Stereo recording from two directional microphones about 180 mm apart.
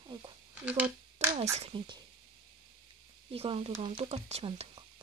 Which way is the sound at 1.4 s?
35° right (ahead or behind).